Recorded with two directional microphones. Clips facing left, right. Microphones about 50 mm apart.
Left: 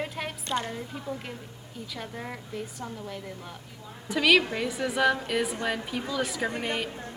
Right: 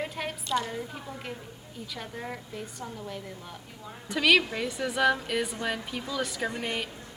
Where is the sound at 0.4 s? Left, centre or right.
Left.